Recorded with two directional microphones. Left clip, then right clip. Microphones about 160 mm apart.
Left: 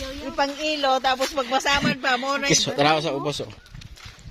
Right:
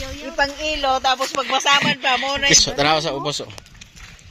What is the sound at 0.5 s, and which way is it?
Music, 90° left.